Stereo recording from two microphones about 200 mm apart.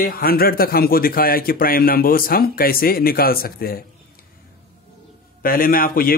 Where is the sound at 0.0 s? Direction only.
50° left (ahead or behind).